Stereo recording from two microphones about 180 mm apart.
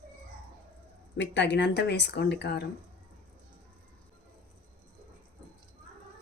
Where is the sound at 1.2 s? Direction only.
80° left.